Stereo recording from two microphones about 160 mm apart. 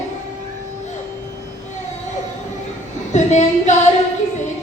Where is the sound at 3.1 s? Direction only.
45° left (ahead or behind).